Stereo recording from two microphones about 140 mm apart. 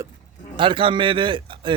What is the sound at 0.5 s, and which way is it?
A man's voice, 35° right (ahead or behind).